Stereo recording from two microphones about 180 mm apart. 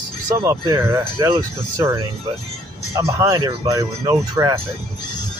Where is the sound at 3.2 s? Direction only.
20° right (ahead or behind).